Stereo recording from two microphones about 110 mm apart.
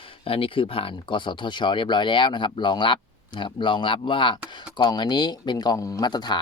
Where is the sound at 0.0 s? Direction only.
55° left (ahead or behind).